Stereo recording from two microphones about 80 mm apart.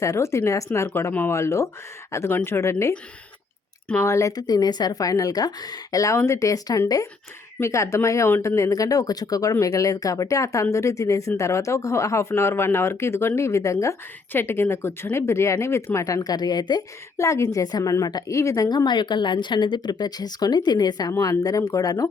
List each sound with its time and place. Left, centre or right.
0.0 s speech: left
4.0 s a woman's voice: left
14.3 s speech: left
17.2 s a woman's voice: left
18.3 s a woman's voice: left
18.9 s speech: left
21.1 s a woman's voice: left